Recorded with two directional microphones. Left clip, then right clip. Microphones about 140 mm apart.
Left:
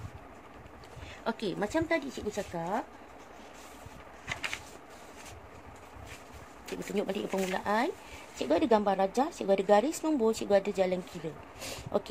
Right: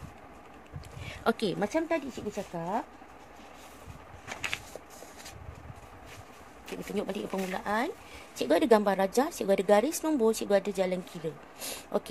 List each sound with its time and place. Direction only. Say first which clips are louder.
1.0 s a sound: right 5 dB; 90° right
1.6 s speech: right 1 dB; 40° right (ahead or behind)
2.0 s speech: left 1 dB; 15° right (ahead or behind)
6.7 s speech: left 1 dB; centre (ahead or behind)
8.4 s speech: right 3 dB; 25° right (ahead or behind)